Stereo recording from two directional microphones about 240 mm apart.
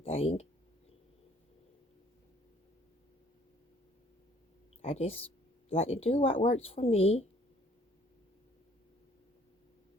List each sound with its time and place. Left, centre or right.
0.0 s a woman's voice: left
4.8 s a woman's voice: left